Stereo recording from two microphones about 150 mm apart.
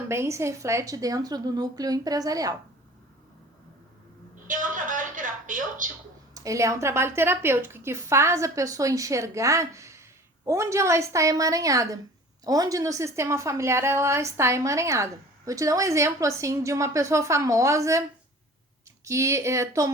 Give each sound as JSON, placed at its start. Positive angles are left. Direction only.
{"t": 0.1, "sound": "a woman's voice", "side_deg": -20}
{"t": 4.4, "sound": "a sound", "side_deg": -60}
{"t": 6.3, "sound": "a woman's voice", "side_deg": -20}
{"t": 19.0, "sound": "a woman's voice", "side_deg": -20}